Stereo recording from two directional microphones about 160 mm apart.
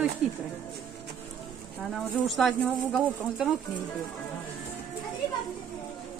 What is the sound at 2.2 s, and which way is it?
Speech, centre (ahead or behind).